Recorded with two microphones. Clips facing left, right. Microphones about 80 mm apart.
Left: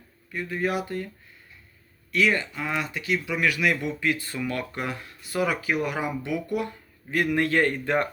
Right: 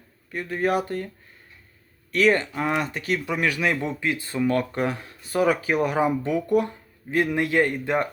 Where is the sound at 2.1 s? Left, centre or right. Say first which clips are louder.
Right 4 dB; right.